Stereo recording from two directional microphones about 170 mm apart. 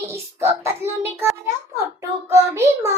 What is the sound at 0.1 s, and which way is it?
A child's voice, 15° right (ahead or behind).